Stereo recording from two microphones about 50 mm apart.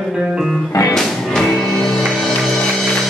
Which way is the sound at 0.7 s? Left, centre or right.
Left.